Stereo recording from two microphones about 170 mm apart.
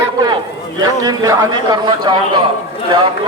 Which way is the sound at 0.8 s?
20° right (ahead or behind).